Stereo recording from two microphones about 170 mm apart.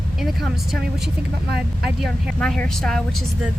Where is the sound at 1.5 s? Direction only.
70° right (ahead or behind).